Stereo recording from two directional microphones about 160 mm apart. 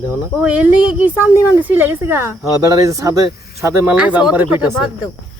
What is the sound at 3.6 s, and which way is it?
Speech, 10° right (ahead or behind).